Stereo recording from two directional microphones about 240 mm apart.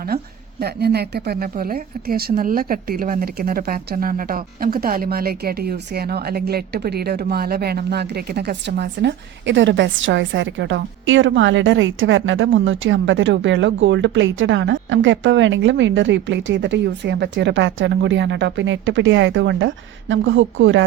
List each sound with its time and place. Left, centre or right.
0.6 s a woman's voice: right